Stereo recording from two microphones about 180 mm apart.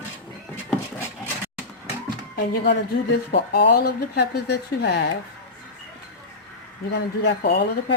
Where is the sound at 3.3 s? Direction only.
65° left (ahead or behind).